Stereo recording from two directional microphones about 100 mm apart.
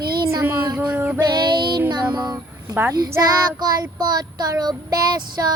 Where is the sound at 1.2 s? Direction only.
45° right (ahead or behind).